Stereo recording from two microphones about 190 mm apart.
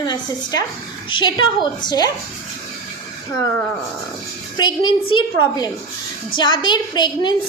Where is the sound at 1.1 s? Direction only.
25° left (ahead or behind).